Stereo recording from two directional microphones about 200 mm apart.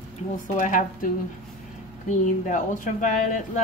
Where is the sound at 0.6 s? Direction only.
40° left (ahead or behind).